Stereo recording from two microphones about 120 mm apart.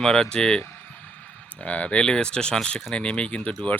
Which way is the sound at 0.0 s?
5° left (ahead or behind).